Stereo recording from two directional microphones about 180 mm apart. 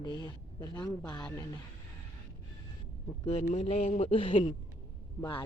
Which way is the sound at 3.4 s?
40° left (ahead or behind).